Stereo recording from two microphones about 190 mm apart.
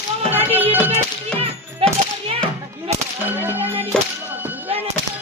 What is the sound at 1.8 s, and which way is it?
Children playing, 30° right (ahead or behind).